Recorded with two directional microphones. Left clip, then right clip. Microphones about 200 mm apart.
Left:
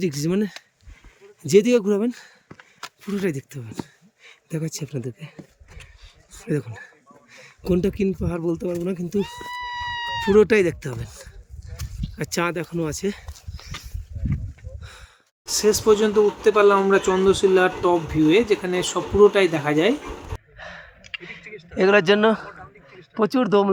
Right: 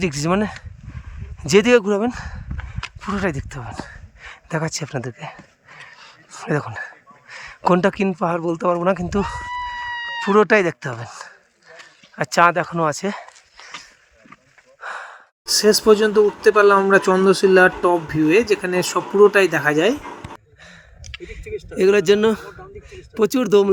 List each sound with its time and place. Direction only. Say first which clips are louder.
0.0 s speech: right 4 dB; 5° right (ahead or behind)
6.4 s speech: right 5 dB; centre (ahead or behind)
13.6 s a sound: right 2 dB; 20° left (ahead or behind)
14.8 s sigh: right 18 dB; 5° right (ahead or behind)
15.4 s speech: right 4 dB; 25° right (ahead or behind)
20.6 s gasp: left 5 dB; 5° right (ahead or behind)
21.8 s a man's voice: right 1 dB; 10° right (ahead or behind)